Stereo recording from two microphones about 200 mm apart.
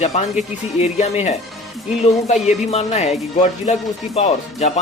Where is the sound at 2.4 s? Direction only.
30° left (ahead or behind).